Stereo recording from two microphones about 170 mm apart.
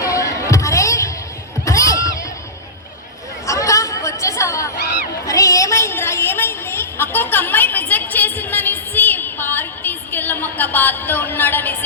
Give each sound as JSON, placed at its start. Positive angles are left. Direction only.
{"t": 0.0, "sound": "music", "side_deg": 20}
{"t": 1.6, "sound": "crowd", "side_deg": 20}
{"t": 3.4, "sound": "chatter", "side_deg": 20}
{"t": 5.2, "sound": "a sound", "side_deg": 20}